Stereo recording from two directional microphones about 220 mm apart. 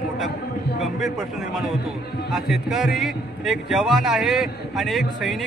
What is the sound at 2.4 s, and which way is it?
A man's voice, centre (ahead or behind).